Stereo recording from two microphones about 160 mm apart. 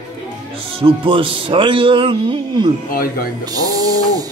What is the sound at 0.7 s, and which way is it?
Speech, 35° right (ahead or behind).